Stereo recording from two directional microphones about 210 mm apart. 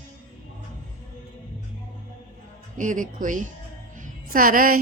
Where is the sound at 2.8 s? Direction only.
40° right (ahead or behind).